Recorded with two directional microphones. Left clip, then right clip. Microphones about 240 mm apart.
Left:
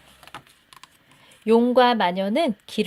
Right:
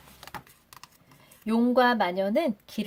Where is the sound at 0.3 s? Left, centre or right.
Centre.